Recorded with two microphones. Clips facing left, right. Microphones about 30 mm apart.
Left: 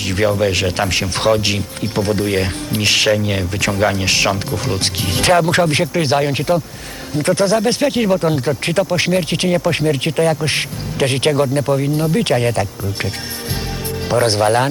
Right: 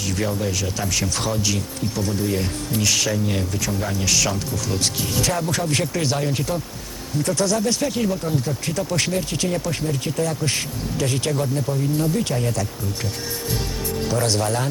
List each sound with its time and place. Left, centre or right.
0.0 s speech: left
3.6 s speech: left
4.0 s speech: left
5.8 s speech: left
8.9 s speech: left
9.7 s speech: left
14.1 s speech: left